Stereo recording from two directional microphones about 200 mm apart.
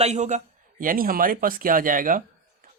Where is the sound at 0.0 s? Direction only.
35° right (ahead or behind).